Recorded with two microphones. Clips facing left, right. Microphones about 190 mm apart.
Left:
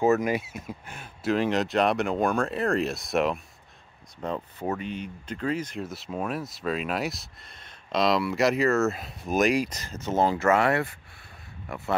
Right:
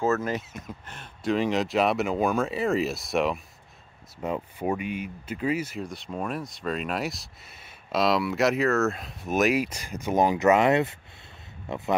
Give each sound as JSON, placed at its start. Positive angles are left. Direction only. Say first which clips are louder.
{"t": 0.0, "sound": "speech", "louder": "left 3 dB", "side_deg": 15}
{"t": 4.2, "sound": "speech", "louder": "right 2 dB", "side_deg": -10}
{"t": 5.9, "sound": "speech", "louder": "left 1 dB", "side_deg": 5}